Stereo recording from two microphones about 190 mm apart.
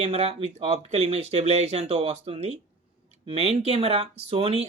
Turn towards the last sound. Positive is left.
turn(degrees=-30)  # may be behind; listen again after turning